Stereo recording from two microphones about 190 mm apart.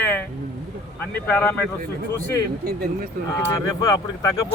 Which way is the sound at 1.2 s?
10° left (ahead or behind).